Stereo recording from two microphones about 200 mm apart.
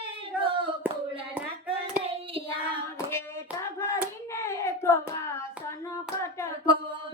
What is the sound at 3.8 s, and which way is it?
Hands, 15° left (ahead or behind).